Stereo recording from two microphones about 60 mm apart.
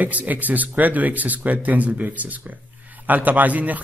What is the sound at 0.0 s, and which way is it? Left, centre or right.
A man's voice, right.